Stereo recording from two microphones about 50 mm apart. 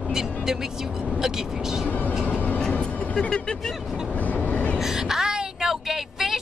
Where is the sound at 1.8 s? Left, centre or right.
Left.